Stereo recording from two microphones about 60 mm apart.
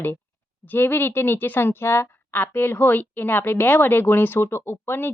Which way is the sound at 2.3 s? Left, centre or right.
Left.